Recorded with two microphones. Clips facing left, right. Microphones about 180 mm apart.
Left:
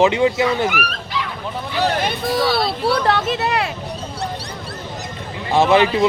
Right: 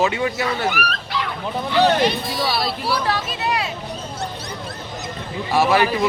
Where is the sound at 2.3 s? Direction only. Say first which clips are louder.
Left 5 dB; 55° left (ahead or behind).